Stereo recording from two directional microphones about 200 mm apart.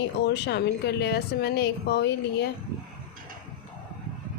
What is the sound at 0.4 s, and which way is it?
A woman's voice, 55° left (ahead or behind).